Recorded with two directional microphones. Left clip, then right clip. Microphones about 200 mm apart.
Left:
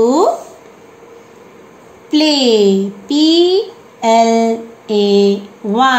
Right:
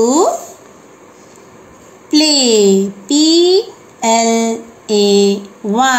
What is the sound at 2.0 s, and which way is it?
A woman's voice, 15° right (ahead or behind).